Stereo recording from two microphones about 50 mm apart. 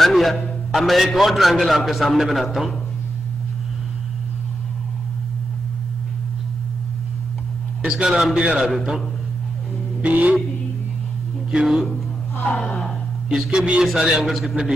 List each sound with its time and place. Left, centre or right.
0.0 s music: centre
0.7 s a man's voice: centre
7.8 s a man's voice: centre
10.0 s music: right
11.6 s a man's voice: centre
12.4 s a sound: left
13.3 s a man's voice: centre